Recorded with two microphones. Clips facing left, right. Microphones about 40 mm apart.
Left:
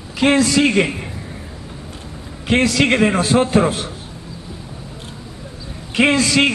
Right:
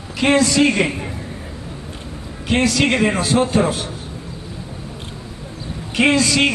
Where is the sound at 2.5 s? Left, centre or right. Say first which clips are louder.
Left 1 dB; left.